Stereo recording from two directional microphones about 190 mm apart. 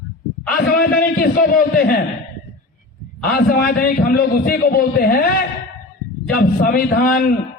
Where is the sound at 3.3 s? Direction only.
50° left (ahead or behind).